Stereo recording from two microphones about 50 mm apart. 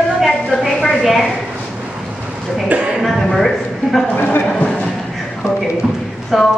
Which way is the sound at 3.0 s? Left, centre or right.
Centre.